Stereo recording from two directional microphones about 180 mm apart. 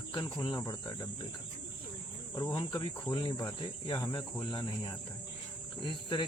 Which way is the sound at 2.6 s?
25° left (ahead or behind).